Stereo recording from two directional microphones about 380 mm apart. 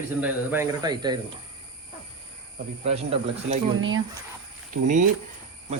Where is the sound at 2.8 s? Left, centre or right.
Centre.